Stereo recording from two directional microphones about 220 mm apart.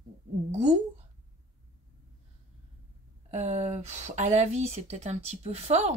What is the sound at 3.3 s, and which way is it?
Speech, 30° right (ahead or behind).